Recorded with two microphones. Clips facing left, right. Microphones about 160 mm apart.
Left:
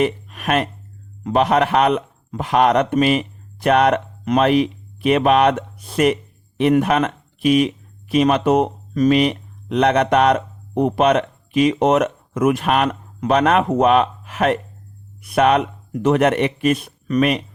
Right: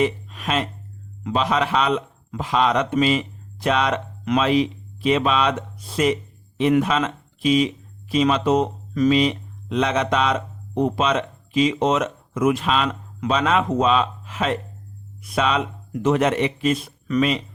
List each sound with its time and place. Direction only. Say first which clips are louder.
0.0 s speech: left 2 dB; 60° left (ahead or behind)